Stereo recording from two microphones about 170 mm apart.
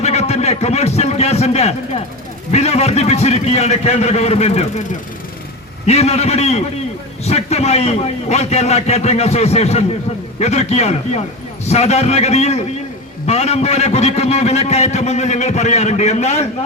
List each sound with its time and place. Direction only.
0.0 s a man's voice: 40° left (ahead or behind)
5.8 s a man's voice: 40° left (ahead or behind)